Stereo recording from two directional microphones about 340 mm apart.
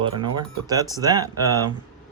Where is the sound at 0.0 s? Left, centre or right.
Centre.